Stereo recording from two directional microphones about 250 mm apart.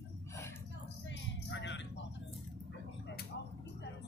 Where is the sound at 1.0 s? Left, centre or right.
Left.